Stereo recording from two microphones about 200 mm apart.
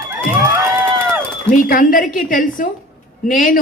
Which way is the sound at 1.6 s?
40° left (ahead or behind).